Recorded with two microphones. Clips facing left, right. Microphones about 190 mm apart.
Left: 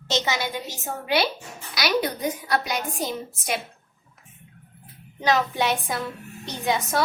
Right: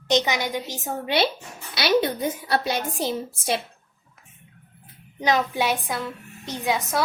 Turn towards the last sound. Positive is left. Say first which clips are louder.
# even
turn(degrees=0)  # may be behind; listen again after turning